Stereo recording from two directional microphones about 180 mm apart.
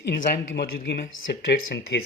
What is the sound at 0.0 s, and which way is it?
A man's voice, 60° left (ahead or behind).